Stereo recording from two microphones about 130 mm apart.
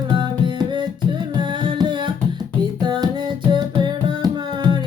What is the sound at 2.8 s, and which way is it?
Music, 35° right (ahead or behind).